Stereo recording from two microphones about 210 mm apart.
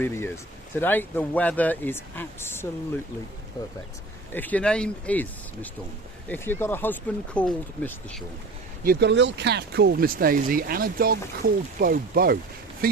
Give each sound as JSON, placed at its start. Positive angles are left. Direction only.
{"t": 0.0, "sound": "speech", "side_deg": 10}
{"t": 4.4, "sound": "speech", "side_deg": 5}
{"t": 8.8, "sound": "speech", "side_deg": -50}